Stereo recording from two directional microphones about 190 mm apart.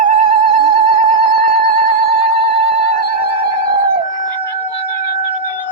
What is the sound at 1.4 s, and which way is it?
Music, 30° right (ahead or behind).